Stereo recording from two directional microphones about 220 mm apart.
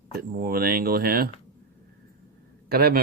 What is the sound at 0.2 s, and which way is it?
Owl, 40° right (ahead or behind).